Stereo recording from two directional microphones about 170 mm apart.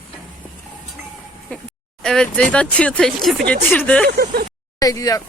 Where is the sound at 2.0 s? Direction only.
5° left (ahead or behind).